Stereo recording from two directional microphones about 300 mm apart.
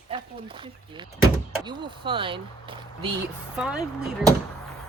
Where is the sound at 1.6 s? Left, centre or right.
Centre.